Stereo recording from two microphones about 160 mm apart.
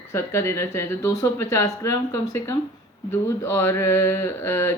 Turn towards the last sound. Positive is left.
turn(degrees=15)  # may be behind; listen again after turning